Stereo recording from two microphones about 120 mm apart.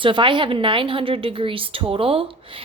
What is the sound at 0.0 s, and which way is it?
A woman's voice, 45° right (ahead or behind).